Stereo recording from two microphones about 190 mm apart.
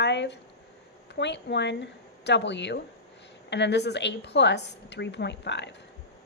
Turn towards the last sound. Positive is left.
turn(degrees=65)  # may be behind; listen again after turning